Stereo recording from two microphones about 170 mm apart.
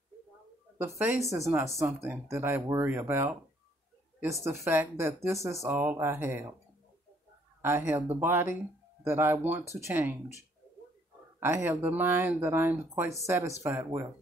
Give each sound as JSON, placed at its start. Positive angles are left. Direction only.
{"t": 0.7, "sound": "speech", "side_deg": -15}
{"t": 7.6, "sound": "speech", "side_deg": -15}
{"t": 11.3, "sound": "speech", "side_deg": -15}